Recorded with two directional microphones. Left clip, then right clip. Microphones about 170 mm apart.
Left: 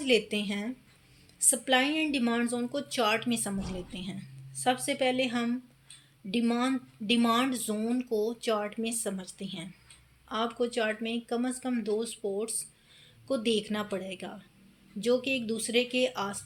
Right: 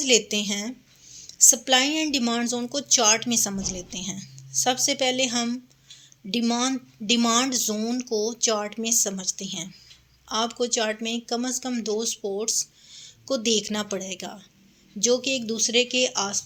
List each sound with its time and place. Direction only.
0.0 s speech: 25° right (ahead or behind)